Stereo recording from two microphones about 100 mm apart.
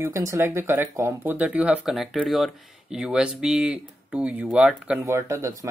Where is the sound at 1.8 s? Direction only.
Centre (ahead or behind).